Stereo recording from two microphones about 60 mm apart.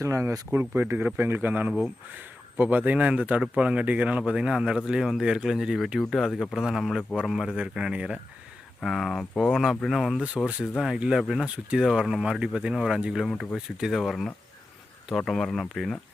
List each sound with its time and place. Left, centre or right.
0.0 s speech: right
0.5 s a man's voice: right; by 4.8 s centre
4.9 s speech: centre
8.8 s speech: centre
10.2 s speech: centre